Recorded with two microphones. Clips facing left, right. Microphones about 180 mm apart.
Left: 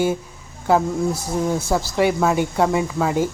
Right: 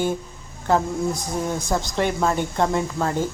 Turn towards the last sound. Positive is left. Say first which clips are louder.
# left 3 dB
turn(degrees=10)  # may be behind; listen again after turning